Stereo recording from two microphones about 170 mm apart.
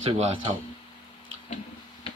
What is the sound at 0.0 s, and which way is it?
Speech, 35° right (ahead or behind).